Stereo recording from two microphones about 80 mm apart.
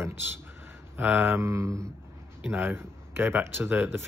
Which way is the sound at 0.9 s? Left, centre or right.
Right.